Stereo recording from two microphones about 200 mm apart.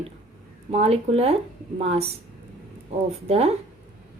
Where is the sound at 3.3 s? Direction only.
30° right (ahead or behind).